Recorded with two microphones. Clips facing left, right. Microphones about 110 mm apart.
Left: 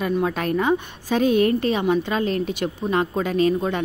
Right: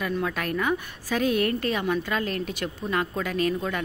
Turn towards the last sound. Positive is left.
turn(degrees=25)  # may be behind; listen again after turning